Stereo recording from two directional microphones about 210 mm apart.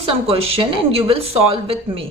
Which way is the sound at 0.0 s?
25° right (ahead or behind).